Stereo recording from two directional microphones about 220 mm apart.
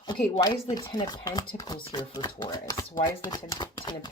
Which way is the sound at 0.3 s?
20° left (ahead or behind).